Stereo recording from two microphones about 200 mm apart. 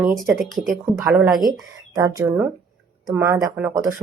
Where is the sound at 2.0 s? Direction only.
20° right (ahead or behind).